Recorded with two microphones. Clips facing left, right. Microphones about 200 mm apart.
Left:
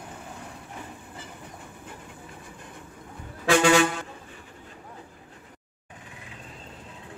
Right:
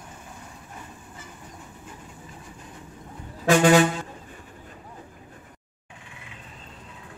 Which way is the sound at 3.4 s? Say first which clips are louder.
Right 3 dB; 45° right (ahead or behind).